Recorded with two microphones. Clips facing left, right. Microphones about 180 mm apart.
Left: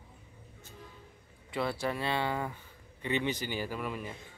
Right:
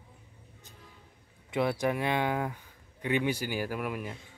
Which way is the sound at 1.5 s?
15° right (ahead or behind).